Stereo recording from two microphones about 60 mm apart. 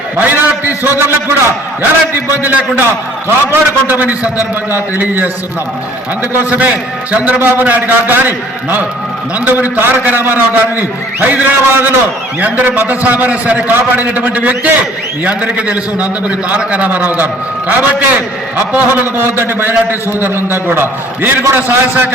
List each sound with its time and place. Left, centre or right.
0.2 s a man's voice: right
2.4 s a man's voice: right
6.4 s a man's voice: right
7.3 s a man's voice: right
13.7 s a man's voice: right